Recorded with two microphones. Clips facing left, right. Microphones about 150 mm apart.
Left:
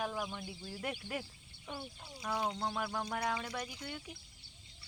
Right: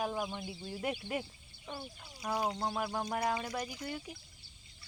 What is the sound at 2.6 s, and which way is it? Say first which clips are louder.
Speech: right 2 dB; 15° right (ahead or behind).